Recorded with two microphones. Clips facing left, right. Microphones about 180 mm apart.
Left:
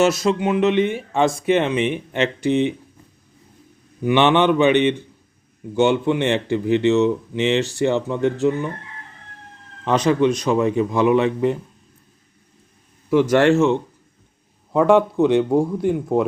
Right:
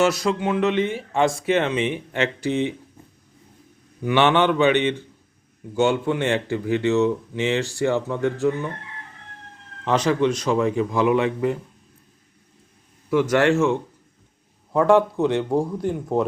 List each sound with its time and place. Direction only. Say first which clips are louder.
0.0 s speech: left 3 dB; 25° left (ahead or behind)
4.0 s speech: left 2 dB; 20° left (ahead or behind)
9.8 s speech: left 3 dB; 20° left (ahead or behind)
13.5 s speech: left 3 dB; 25° left (ahead or behind)